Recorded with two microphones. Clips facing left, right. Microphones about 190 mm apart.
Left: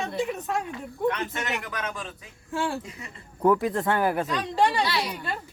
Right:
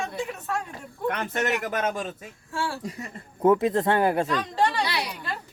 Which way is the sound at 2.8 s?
40° right (ahead or behind).